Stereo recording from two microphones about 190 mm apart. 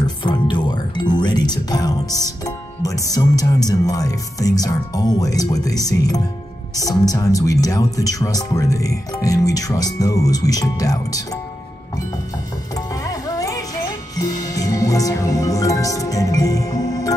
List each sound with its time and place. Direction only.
0.0 s music: 25° left (ahead or behind)
6.8 s speech: 20° left (ahead or behind)
12.7 s music: 20° left (ahead or behind)